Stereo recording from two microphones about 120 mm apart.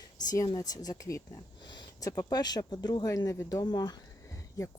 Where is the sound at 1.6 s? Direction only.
40° left (ahead or behind).